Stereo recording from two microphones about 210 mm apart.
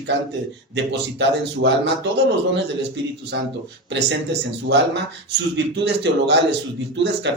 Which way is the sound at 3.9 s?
55° right (ahead or behind).